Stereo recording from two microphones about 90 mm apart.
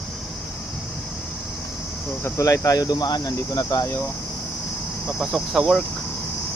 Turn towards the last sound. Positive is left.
turn(degrees=0)  # may be behind; listen again after turning